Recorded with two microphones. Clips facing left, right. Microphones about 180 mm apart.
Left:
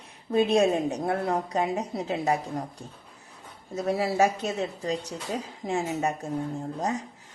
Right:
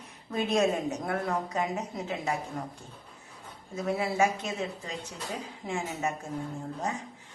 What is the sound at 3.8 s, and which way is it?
A woman's voice, 35° left (ahead or behind).